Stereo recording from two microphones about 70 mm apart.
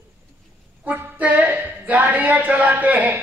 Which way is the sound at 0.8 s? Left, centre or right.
Right.